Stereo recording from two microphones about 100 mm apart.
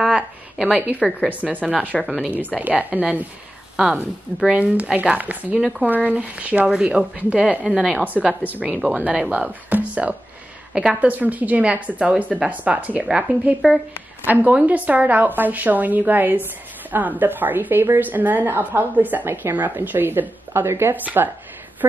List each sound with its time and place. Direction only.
0.0 s a sound: 5° right (ahead or behind)
1.3 s a woman's voice: 15° right (ahead or behind)
4.4 s a woman's voice: 10° right (ahead or behind)
5.6 s speech: centre (ahead or behind)
6.0 s a woman's voice: 15° right (ahead or behind)
8.0 s a woman's voice: 15° right (ahead or behind)
14.2 s a woman's voice: 15° right (ahead or behind)